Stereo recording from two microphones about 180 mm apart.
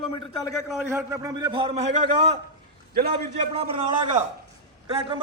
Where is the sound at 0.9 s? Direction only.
15° right (ahead or behind); by 2.2 s 35° right (ahead or behind).